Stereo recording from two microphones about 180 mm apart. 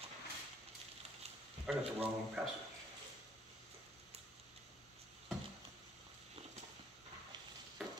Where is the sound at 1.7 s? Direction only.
5° right (ahead or behind).